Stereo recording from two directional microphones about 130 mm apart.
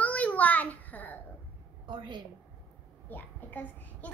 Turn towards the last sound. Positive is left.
turn(degrees=15)  # may be behind; listen again after turning